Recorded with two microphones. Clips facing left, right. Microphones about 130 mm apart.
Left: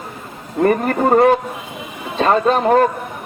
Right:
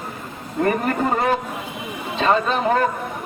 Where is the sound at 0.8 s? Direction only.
50° left (ahead or behind).